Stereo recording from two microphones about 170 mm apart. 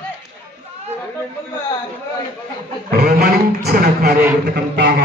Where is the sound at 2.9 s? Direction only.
70° right (ahead or behind).